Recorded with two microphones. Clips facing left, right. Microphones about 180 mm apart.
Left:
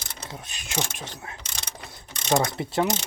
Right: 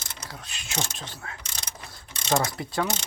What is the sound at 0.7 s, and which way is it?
Speech, 10° left (ahead or behind).